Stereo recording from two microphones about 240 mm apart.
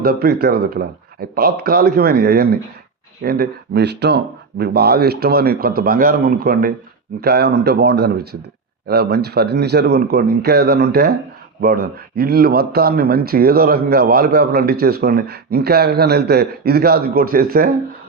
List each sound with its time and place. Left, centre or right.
0.0 s speech: right